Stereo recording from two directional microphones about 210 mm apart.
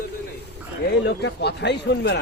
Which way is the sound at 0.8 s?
55° left (ahead or behind).